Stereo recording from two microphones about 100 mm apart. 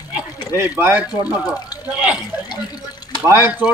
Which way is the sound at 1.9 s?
10° right (ahead or behind).